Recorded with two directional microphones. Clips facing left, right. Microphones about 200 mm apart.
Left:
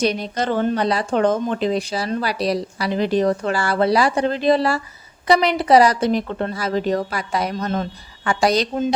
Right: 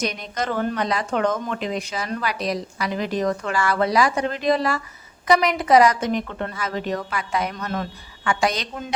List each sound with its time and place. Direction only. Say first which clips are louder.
0.0 s speech: left 6 dB; 30° left (ahead or behind)